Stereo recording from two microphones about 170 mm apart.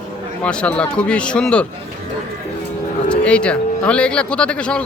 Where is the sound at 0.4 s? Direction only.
5° left (ahead or behind).